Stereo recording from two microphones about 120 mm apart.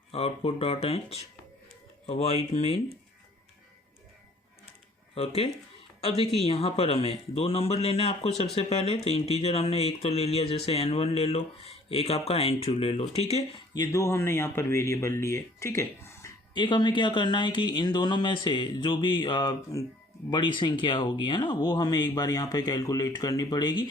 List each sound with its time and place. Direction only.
0.1 s speech: 55° left (ahead or behind)
5.1 s speech: 55° left (ahead or behind)
13.7 s speech: 25° left (ahead or behind)
16.6 s speech: 40° left (ahead or behind)